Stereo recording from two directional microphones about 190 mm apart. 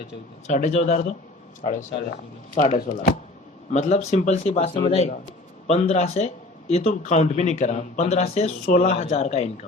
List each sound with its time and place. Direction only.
0.4 s speech: 40° left (ahead or behind)
2.6 s speech: 45° left (ahead or behind)
3.7 s speech: 35° left (ahead or behind)